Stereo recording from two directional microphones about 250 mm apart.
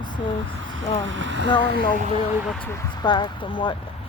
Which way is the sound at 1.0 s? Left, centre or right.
Right.